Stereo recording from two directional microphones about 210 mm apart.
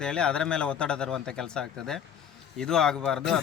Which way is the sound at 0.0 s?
5° left (ahead or behind).